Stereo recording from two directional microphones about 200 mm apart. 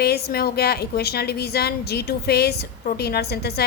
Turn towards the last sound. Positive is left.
turn(degrees=55)  # may be behind; listen again after turning